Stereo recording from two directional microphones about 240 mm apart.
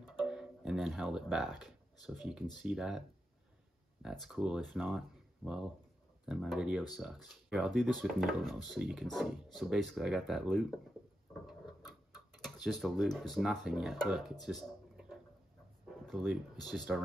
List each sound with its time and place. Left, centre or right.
0.2 s speech: centre
4.0 s speech: centre
11.9 s speech: centre
14.4 s a sound: centre
16.0 s speech: centre